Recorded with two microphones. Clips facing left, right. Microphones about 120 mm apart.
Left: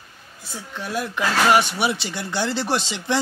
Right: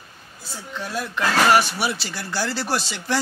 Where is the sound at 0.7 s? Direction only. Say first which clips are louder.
Left 1 dB; 10° left (ahead or behind).